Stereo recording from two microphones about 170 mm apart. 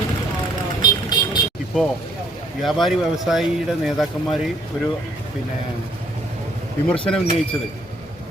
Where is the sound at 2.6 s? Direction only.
Centre (ahead or behind).